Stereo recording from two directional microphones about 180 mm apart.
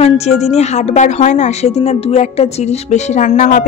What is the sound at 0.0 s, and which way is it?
A woman's voice, 35° left (ahead or behind).